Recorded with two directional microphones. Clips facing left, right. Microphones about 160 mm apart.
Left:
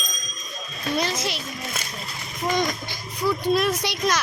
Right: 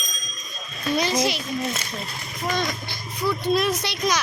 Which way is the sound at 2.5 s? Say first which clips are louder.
Left 2 dB; 15° left (ahead or behind).